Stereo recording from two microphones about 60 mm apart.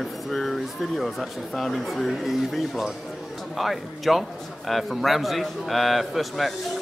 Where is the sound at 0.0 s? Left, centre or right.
Centre.